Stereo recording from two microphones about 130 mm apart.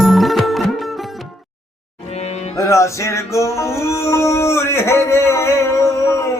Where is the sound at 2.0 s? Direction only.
55° left (ahead or behind).